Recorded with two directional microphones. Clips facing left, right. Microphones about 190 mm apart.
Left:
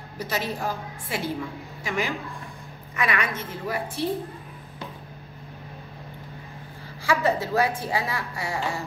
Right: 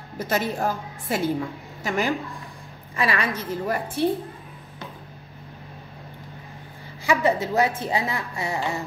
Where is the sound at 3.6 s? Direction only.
50° right (ahead or behind).